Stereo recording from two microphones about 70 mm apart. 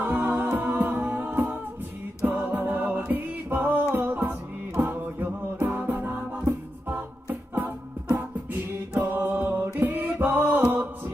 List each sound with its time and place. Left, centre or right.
0.0 s music: right
8.9 s music: right